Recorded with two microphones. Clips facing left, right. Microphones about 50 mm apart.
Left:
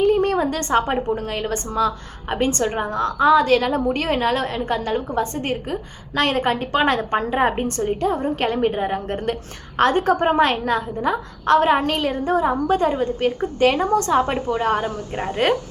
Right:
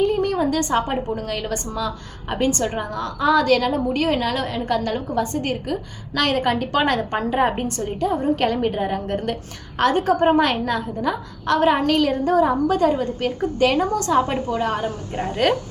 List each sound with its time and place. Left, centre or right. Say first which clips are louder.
0.0 s a sound: left 2 dB; left
0.7 s a woman's voice: left 2 dB; left
1.0 s a woman's voice: left 2 dB; left
7.3 s a woman's voice: right 2 dB; centre